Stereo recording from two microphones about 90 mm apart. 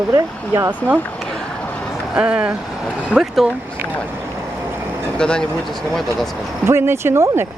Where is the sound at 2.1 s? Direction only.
10° right (ahead or behind).